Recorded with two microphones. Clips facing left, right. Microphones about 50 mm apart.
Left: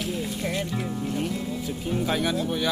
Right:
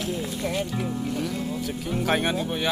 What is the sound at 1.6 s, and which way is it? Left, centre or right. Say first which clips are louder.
Music: even; right.